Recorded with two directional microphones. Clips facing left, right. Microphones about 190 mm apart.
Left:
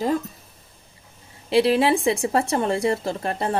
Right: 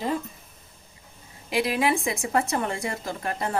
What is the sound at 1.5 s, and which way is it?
A woman's voice, 30° left (ahead or behind).